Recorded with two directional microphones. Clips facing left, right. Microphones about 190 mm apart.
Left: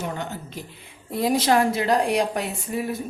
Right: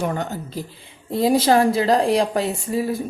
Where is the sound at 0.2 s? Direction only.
35° right (ahead or behind).